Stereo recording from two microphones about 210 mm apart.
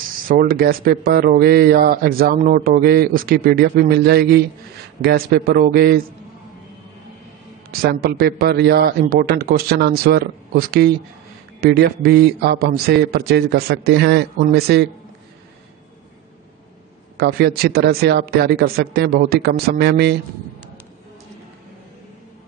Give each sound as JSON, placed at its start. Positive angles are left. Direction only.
{"t": 0.3, "sound": "speech", "side_deg": -45}
{"t": 7.8, "sound": "speech", "side_deg": -45}
{"t": 17.2, "sound": "speech", "side_deg": -50}